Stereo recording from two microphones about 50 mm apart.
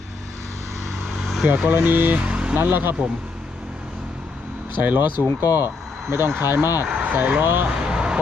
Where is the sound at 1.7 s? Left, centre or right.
Right.